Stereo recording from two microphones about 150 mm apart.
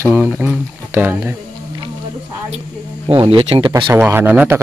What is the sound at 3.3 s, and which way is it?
Speech, 35° right (ahead or behind).